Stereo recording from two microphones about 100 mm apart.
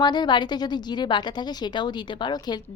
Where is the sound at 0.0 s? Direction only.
45° left (ahead or behind).